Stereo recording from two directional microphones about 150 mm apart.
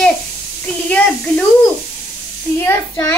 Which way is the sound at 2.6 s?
20° left (ahead or behind).